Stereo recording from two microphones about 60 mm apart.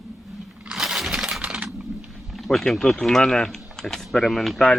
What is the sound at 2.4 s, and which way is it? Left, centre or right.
Speech, centre.